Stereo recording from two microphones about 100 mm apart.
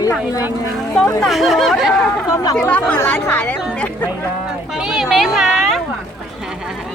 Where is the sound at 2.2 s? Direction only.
35° left (ahead or behind).